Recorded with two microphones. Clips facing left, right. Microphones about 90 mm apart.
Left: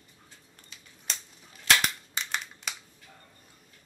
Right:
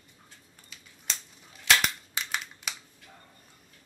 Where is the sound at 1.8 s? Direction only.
5° right (ahead or behind).